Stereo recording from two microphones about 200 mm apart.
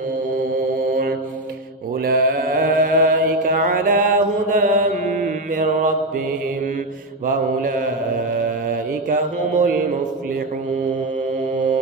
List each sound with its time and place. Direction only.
2.0 s mantra: 50° right (ahead or behind)
7.2 s mantra: 40° right (ahead or behind)